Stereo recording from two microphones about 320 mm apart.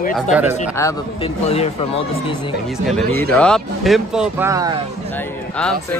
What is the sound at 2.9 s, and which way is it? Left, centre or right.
Speech, centre.